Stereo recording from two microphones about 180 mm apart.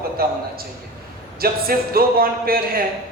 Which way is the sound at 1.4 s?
55° right (ahead or behind).